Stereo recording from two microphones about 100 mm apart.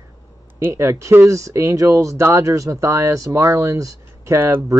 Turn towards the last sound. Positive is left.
turn(degrees=-25)  # may be behind; listen again after turning